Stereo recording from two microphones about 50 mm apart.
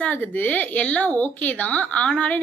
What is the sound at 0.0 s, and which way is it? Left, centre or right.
A woman's voice, left.